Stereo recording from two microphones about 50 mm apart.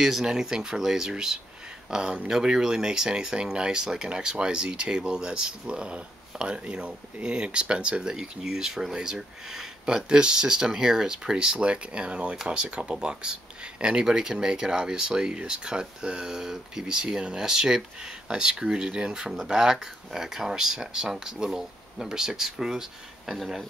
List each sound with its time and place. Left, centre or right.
0.0 s speech: centre